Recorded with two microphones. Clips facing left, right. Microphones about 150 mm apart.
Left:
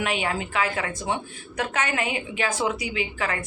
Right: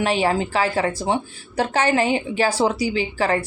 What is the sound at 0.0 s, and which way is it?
A woman's voice, 30° right (ahead or behind).